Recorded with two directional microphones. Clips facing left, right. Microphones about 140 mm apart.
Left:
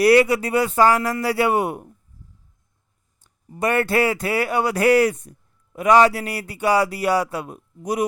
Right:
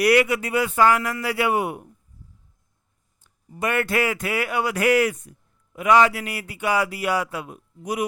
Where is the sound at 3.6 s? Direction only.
35° left (ahead or behind).